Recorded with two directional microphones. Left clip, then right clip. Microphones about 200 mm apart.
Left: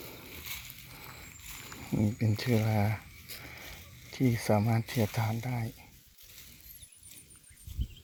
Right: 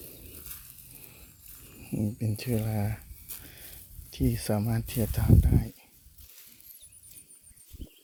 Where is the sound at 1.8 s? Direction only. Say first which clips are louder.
Left 1 dB; 10° right (ahead or behind).